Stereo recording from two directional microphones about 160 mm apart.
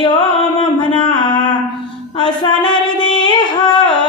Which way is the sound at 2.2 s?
30° left (ahead or behind).